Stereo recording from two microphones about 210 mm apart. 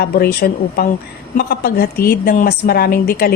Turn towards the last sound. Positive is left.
turn(degrees=45)  # may be behind; listen again after turning